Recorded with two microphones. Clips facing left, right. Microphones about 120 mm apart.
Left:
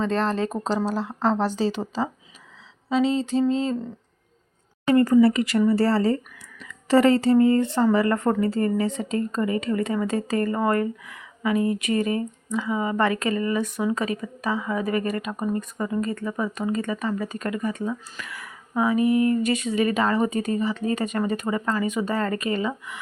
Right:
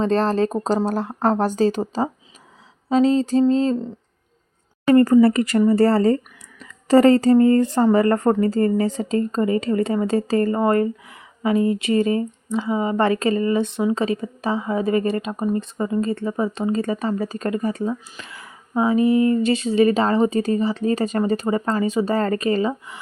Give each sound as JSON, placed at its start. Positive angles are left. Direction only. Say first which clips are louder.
{"t": 0.0, "sound": "speech", "louder": "right 5 dB", "side_deg": -35}
{"t": 0.9, "sound": "speech", "louder": "right 3 dB", "side_deg": -55}
{"t": 4.9, "sound": "speech", "louder": "right 3 dB", "side_deg": -45}